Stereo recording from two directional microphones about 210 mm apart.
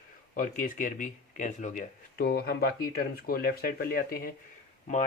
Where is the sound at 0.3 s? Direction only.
40° left (ahead or behind).